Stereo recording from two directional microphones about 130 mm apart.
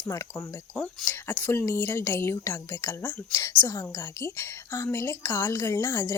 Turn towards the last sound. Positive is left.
turn(degrees=20)  # may be behind; listen again after turning